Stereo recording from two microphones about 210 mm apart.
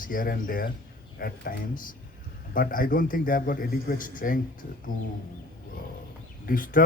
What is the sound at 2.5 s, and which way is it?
A man's voice, 40° left (ahead or behind).